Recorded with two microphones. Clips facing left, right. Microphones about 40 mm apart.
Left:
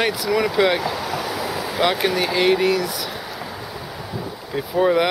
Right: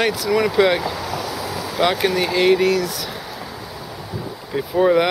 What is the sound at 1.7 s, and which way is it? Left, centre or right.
Speech, centre.